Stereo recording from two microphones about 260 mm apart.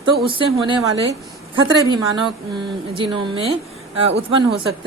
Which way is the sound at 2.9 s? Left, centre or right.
Centre.